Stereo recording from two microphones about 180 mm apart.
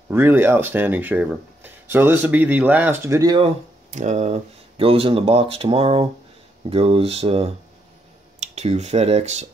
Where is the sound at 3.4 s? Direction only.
40° right (ahead or behind).